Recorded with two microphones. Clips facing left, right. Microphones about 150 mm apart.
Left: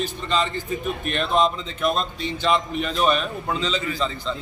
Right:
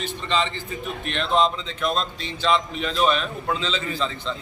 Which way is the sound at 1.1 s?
10° left (ahead or behind).